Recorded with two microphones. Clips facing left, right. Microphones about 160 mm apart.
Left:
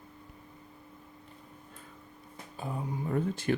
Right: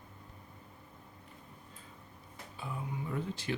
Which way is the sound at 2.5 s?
40° left (ahead or behind).